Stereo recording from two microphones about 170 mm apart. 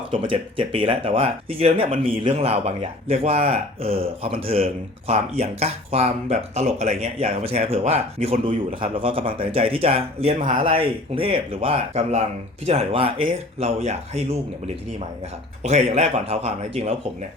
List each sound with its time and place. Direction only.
0.1 s speech: 30° right (ahead or behind)
15.6 s speech: 40° right (ahead or behind)